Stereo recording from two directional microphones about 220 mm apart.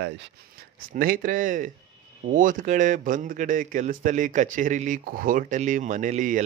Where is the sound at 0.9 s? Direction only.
40° right (ahead or behind).